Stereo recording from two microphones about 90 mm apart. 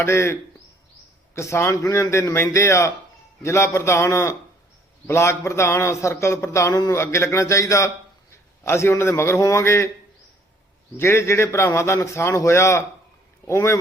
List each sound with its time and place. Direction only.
0.0 s speech: 30° left (ahead or behind)
1.4 s a man's voice: 30° left (ahead or behind)
10.9 s a man's voice: 30° left (ahead or behind)